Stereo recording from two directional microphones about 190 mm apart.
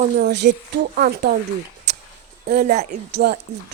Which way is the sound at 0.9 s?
55° right (ahead or behind).